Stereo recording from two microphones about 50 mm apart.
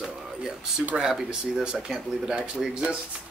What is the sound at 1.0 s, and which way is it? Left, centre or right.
Speech, centre.